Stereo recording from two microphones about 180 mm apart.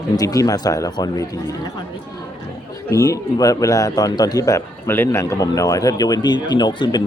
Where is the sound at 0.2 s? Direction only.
20° left (ahead or behind).